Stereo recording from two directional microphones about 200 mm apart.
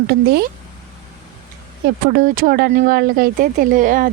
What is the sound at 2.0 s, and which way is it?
Speech, 45° right (ahead or behind).